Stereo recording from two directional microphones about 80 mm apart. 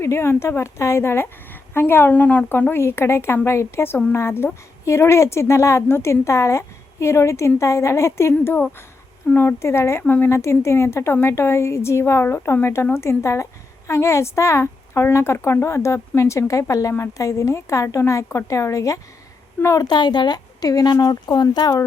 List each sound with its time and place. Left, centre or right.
0.0 s a woman's voice: left
19.9 s speech: left